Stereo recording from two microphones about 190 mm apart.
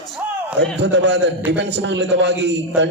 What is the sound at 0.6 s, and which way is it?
A man's voice, 65° right (ahead or behind).